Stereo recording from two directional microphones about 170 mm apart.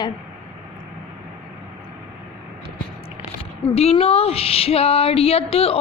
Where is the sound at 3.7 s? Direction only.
35° left (ahead or behind).